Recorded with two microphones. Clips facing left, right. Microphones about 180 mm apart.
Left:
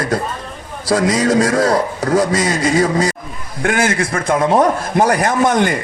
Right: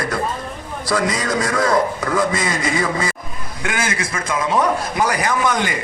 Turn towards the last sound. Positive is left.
turn(degrees=50)  # may be behind; listen again after turning